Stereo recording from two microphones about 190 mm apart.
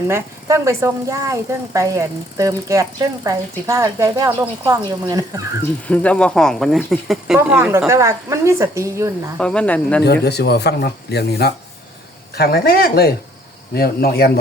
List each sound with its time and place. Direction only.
0.1 s speech: 15° right (ahead or behind)
5.9 s speech: 5° left (ahead or behind)
7.3 s speech: 10° right (ahead or behind)
9.4 s speech: 5° left (ahead or behind)
10.0 s speech: 60° left (ahead or behind)